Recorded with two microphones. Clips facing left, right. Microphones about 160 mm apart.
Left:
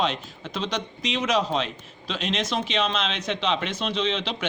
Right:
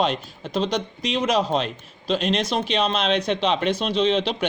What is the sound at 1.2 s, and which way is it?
Speech, 35° right (ahead or behind).